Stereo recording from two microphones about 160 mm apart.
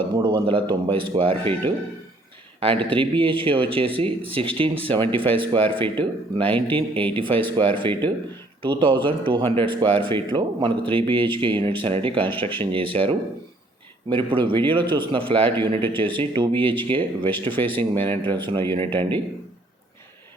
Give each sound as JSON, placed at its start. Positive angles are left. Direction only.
{"t": 0.0, "sound": "speech", "side_deg": -30}
{"t": 17.5, "sound": "speech", "side_deg": 10}
{"t": 18.1, "sound": "speech", "side_deg": -30}